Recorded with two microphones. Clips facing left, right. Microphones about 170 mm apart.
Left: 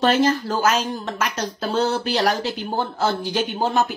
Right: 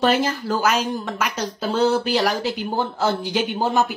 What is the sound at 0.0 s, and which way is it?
Speech, 5° right (ahead or behind).